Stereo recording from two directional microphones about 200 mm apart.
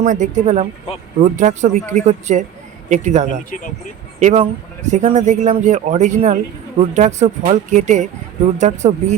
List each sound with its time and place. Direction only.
0.0 s a man's voice: 40° right (ahead or behind)
3.2 s speech: 40° left (ahead or behind)
4.2 s a man's voice: 35° right (ahead or behind)